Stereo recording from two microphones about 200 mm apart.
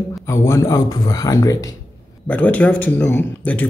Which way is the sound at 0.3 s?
15° left (ahead or behind).